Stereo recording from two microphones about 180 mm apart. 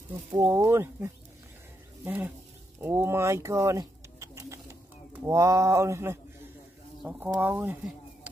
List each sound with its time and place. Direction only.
0.3 s speech: 20° right (ahead or behind)